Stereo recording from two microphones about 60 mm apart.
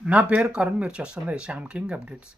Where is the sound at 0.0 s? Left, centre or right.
Centre.